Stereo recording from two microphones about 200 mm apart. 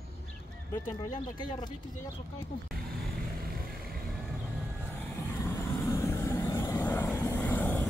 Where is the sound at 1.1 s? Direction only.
25° left (ahead or behind).